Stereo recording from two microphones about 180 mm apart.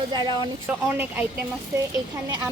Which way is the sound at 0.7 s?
10° right (ahead or behind).